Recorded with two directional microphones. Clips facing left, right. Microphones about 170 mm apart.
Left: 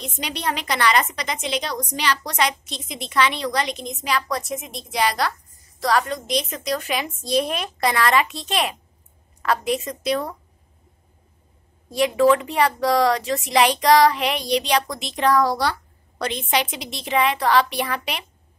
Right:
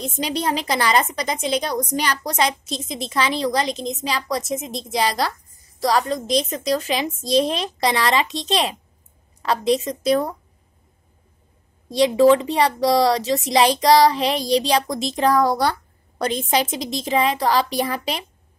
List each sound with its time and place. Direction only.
0.0 s a woman's voice: 35° right (ahead or behind)
1.6 s a woman's voice: 50° right (ahead or behind)
2.3 s a woman's voice: 30° right (ahead or behind)
10.0 s a woman's voice: 45° right (ahead or behind)
12.0 s a woman's voice: 30° right (ahead or behind)
17.0 s a child's voice: 30° right (ahead or behind)